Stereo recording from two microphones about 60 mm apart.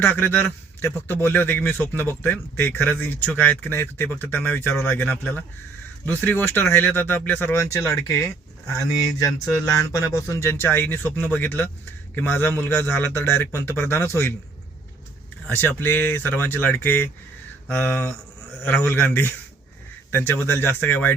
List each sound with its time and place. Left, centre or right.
0.0 s a man's voice: left
7.5 s speech: left
8.6 s a man's voice: left
15.4 s a man's voice: left